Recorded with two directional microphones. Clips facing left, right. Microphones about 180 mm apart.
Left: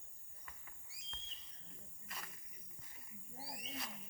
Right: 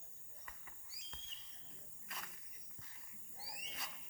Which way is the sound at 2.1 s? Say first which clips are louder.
Even; centre (ahead or behind).